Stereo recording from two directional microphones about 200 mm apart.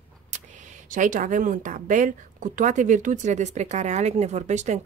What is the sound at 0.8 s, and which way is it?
A woman's voice, 40° right (ahead or behind).